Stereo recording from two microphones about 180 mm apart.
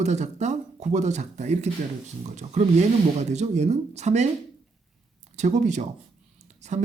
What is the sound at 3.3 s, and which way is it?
Speech, 40° right (ahead or behind).